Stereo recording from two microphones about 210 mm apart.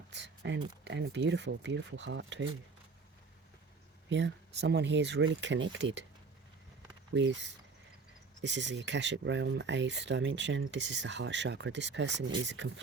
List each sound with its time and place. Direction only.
0.1 s speech: 55° right (ahead or behind)
4.1 s speech: 55° right (ahead or behind)
7.1 s speech: 60° right (ahead or behind)